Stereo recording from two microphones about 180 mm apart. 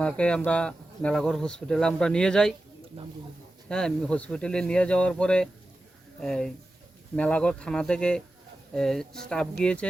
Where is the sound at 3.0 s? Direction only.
35° right (ahead or behind).